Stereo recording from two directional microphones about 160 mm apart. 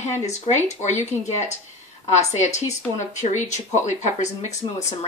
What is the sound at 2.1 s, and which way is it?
A woman's voice, 45° left (ahead or behind).